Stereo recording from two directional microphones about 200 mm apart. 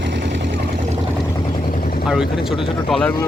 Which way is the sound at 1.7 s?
45° left (ahead or behind).